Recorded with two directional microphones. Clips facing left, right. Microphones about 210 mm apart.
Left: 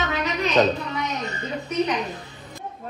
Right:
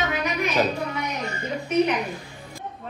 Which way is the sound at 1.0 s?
20° left (ahead or behind).